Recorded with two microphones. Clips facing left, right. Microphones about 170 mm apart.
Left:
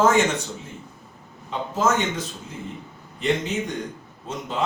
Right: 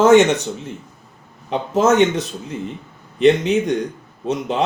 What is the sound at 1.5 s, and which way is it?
Speech, 70° right (ahead or behind).